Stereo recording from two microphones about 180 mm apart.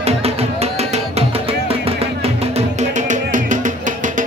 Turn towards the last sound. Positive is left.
turn(degrees=-45)  # may be behind; listen again after turning